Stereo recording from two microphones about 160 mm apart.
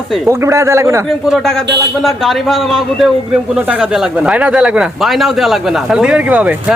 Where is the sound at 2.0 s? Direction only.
Centre (ahead or behind).